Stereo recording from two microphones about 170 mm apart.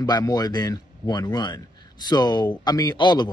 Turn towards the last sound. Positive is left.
turn(degrees=25)  # may be behind; listen again after turning